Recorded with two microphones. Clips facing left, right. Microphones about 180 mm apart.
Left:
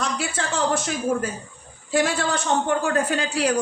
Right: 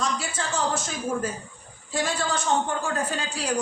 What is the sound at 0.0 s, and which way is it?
A man's voice, 65° left (ahead or behind).